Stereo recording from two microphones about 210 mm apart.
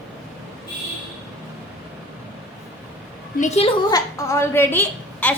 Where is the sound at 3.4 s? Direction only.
30° left (ahead or behind).